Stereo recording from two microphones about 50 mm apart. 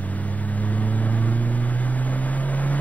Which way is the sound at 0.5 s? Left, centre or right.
Left.